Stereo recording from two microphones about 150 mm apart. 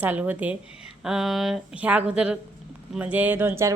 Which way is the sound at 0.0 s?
10° right (ahead or behind).